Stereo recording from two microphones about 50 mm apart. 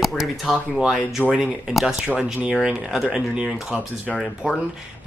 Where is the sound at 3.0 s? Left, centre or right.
Centre.